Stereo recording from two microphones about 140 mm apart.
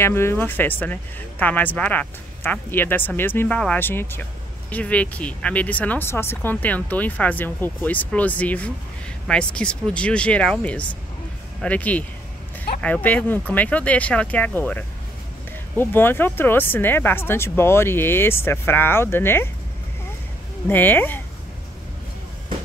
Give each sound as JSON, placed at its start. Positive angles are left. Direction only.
{"t": 0.0, "sound": "speech", "side_deg": 15}
{"t": 20.6, "sound": "speech", "side_deg": 15}